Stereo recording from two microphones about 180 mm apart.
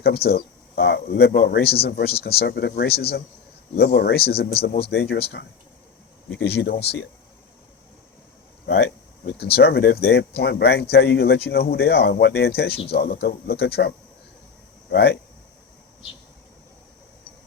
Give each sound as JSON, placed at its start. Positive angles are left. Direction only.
{"t": 0.0, "sound": "speech", "side_deg": 60}
{"t": 8.6, "sound": "speech", "side_deg": 60}